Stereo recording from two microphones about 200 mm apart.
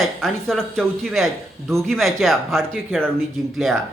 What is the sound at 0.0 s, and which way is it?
A man's voice, centre (ahead or behind).